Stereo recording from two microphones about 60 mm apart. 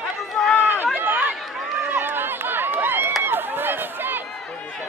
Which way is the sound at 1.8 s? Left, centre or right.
Right.